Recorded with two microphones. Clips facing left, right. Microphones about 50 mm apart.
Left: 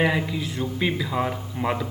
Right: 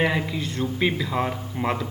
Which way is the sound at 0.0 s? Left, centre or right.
Centre.